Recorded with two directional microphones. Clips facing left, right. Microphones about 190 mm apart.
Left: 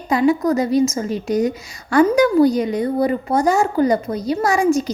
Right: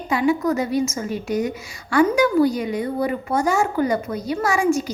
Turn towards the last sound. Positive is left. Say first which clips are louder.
# left 3 dB
turn(degrees=35)  # may be behind; listen again after turning